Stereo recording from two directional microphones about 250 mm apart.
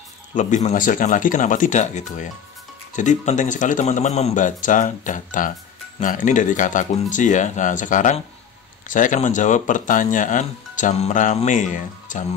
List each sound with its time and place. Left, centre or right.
0.3 s speech: left